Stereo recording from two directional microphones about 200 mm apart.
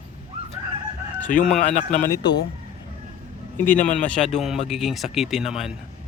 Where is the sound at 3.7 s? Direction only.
40° left (ahead or behind).